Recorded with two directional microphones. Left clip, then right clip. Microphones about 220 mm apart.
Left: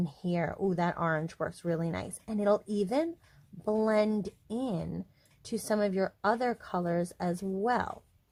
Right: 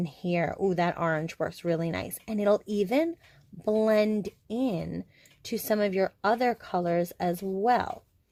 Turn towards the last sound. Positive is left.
turn(degrees=-20)  # may be behind; listen again after turning